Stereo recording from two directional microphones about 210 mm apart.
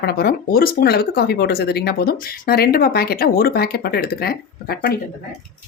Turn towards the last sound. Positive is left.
turn(degrees=45)  # may be behind; listen again after turning